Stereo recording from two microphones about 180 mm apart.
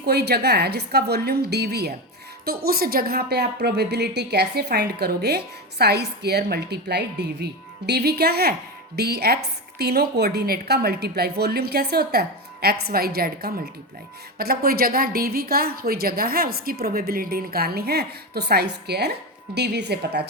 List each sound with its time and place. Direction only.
0.0 s a woman's voice: 65° right (ahead or behind)